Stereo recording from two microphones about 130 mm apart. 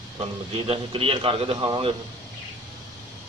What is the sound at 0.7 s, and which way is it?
A man's voice, 45° right (ahead or behind).